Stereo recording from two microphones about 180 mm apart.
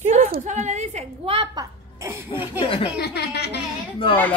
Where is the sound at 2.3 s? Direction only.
30° left (ahead or behind).